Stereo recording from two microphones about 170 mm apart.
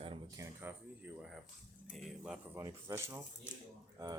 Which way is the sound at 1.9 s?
Centre (ahead or behind).